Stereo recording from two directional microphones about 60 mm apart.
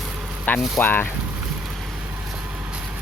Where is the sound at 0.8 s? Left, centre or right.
Left.